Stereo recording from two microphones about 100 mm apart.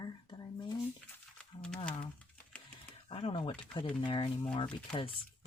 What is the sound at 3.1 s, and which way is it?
Speech, 65° left (ahead or behind).